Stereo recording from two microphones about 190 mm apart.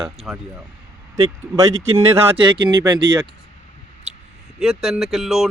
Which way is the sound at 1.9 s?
30° right (ahead or behind).